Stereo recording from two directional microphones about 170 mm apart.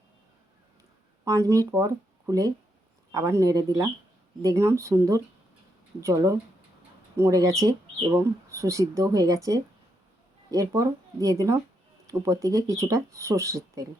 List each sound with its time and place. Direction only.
1.2 s speech: 20° right (ahead or behind)